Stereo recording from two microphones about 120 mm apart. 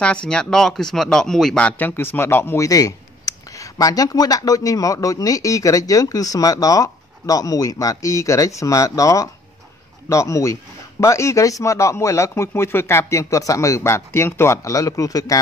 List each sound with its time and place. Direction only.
0.0 s a man's voice: 10° left (ahead or behind); by 15.4 s 30° left (ahead or behind)